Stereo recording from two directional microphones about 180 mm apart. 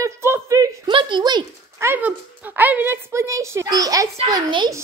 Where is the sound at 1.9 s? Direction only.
10° right (ahead or behind).